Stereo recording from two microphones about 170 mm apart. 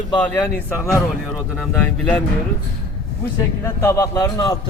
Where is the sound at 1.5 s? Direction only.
Centre (ahead or behind).